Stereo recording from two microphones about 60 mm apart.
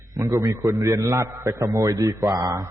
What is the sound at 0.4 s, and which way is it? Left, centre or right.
A man's voice, right.